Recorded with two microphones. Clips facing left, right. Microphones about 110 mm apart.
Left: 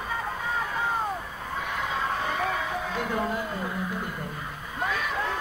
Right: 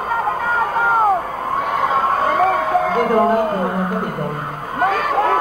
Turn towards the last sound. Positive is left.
turn(degrees=-60)  # may be behind; listen again after turning